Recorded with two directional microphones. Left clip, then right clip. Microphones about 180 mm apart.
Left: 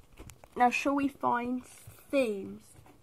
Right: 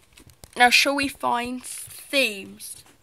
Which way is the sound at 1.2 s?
15° right (ahead or behind).